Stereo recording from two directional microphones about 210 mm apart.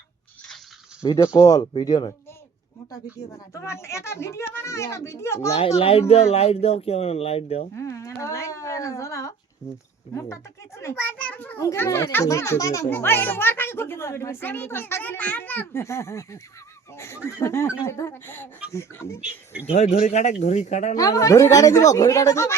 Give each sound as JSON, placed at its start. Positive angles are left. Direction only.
{"t": 1.0, "sound": "a child's voice", "side_deg": 20}
{"t": 5.5, "sound": "speech", "side_deg": 30}
{"t": 7.8, "sound": "a sound", "side_deg": 15}
{"t": 10.8, "sound": "a child's voice", "side_deg": 10}
{"t": 19.6, "sound": "speech", "side_deg": 35}
{"t": 20.9, "sound": "a child's voice", "side_deg": 15}